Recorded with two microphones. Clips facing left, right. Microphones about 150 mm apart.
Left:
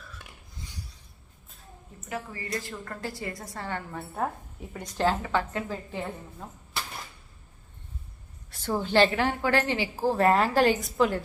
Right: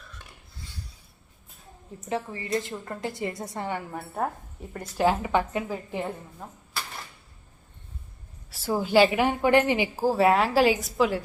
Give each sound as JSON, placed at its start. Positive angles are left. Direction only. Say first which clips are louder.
{"t": 2.0, "sound": "a woman's voice", "louder": "right 5 dB", "side_deg": -25}
{"t": 5.0, "sound": "a woman's voice", "louder": "right 3 dB", "side_deg": -15}
{"t": 8.4, "sound": "a woman's voice", "louder": "right 2 dB", "side_deg": -5}